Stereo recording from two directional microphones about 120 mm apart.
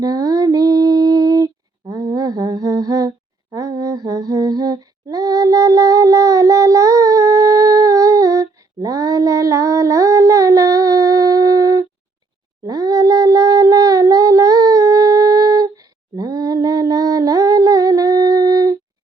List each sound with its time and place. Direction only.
0.0 s female singing: 30° right (ahead or behind)
1.9 s lullaby: 25° right (ahead or behind)
3.5 s female singing: 25° right (ahead or behind)
12.6 s cat: 30° right (ahead or behind)